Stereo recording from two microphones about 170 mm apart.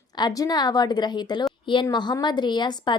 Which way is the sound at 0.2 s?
25° left (ahead or behind).